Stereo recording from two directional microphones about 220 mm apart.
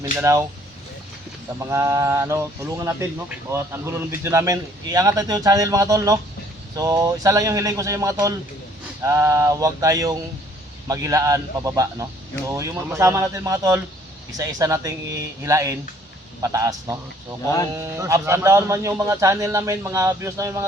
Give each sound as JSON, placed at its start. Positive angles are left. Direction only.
{"t": 0.0, "sound": "speech", "side_deg": -15}
{"t": 1.5, "sound": "speech", "side_deg": -15}